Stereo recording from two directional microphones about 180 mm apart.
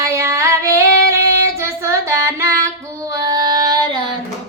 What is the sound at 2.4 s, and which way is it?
Music, 15° right (ahead or behind).